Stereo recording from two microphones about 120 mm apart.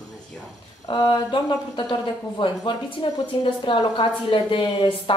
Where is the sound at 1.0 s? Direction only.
40° left (ahead or behind).